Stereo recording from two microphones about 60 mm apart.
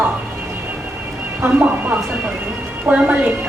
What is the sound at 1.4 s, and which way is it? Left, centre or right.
A woman's voice, right.